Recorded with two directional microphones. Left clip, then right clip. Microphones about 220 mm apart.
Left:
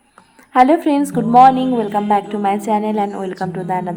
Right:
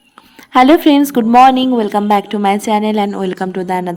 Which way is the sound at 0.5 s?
35° right (ahead or behind).